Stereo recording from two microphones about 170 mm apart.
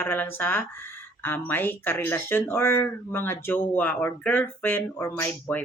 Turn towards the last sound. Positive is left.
turn(degrees=10)  # may be behind; listen again after turning